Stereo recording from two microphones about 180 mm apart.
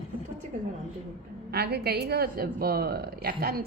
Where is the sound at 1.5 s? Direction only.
60° right (ahead or behind).